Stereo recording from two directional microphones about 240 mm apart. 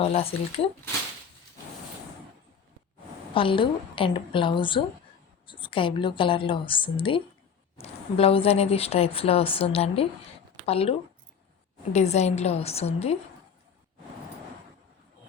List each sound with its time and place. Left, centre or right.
0.0 s speech: left
3.3 s speech: left
11.9 s speech: left